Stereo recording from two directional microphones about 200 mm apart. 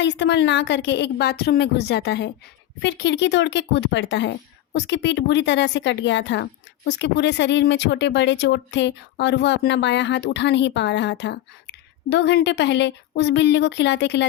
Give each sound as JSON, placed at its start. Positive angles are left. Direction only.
{"t": 0.0, "sound": "speech", "side_deg": 60}